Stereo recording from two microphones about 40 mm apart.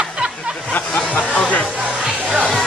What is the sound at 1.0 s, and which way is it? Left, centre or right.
Speech, left.